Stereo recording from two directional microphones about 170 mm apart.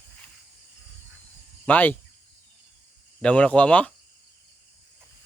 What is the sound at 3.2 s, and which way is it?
Speech, 5° left (ahead or behind).